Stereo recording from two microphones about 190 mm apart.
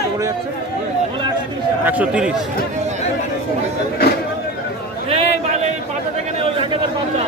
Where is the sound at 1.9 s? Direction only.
5° right (ahead or behind).